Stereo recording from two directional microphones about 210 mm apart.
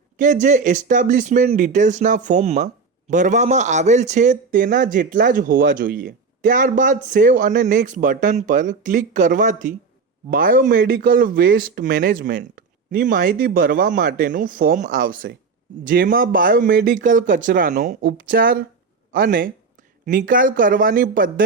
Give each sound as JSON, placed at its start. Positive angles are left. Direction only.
{"t": 0.2, "sound": "speech", "side_deg": -35}